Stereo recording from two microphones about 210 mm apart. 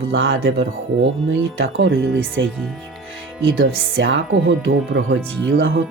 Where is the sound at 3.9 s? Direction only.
65° right (ahead or behind).